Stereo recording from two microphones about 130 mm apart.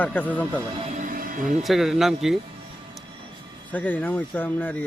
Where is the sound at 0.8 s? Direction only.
70° right (ahead or behind); by 1.6 s 90° right.